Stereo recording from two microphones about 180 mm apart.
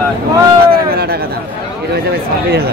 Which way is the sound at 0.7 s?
60° right (ahead or behind).